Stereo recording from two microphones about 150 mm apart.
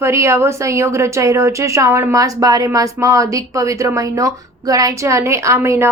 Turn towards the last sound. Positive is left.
turn(degrees=-20)  # may be behind; listen again after turning